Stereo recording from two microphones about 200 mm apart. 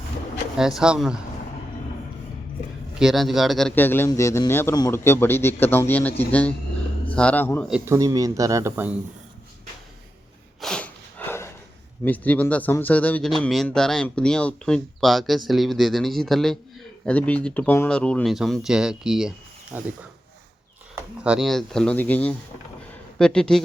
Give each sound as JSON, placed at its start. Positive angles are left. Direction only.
{"t": 0.5, "sound": "speech", "side_deg": -5}
{"t": 3.0, "sound": "a man's voice", "side_deg": 0}
{"t": 7.7, "sound": "speech", "side_deg": -15}
{"t": 10.6, "sound": "sniff", "side_deg": 5}
{"t": 12.0, "sound": "speech", "side_deg": 10}
{"t": 20.9, "sound": "speech", "side_deg": -5}
{"t": 22.9, "sound": "a sound", "side_deg": 5}